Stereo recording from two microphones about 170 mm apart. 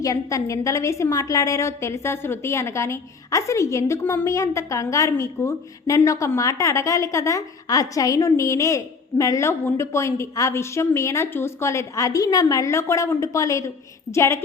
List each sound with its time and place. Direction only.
0.0 s a woman's voice: 20° left (ahead or behind)